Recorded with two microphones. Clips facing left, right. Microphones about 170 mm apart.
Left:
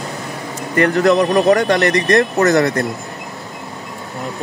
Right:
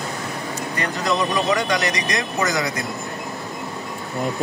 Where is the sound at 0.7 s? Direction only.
60° left (ahead or behind).